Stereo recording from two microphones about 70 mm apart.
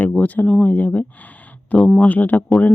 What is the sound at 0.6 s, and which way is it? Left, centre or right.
Speech, left.